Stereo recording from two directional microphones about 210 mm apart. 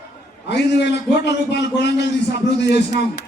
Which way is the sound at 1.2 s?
55° left (ahead or behind).